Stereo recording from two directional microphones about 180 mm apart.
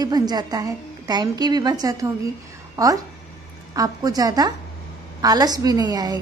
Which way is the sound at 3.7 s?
20° right (ahead or behind).